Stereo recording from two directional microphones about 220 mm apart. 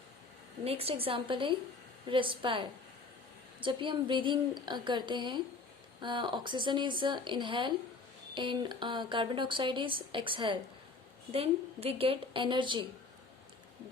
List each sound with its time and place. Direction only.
0.6 s a woman's voice: 25° right (ahead or behind)